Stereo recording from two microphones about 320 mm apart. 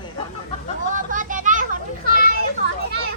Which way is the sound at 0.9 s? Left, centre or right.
Right.